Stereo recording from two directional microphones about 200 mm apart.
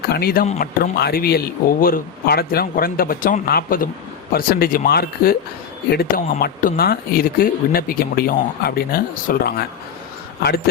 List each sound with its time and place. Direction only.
0.1 s speech: 50° left (ahead or behind)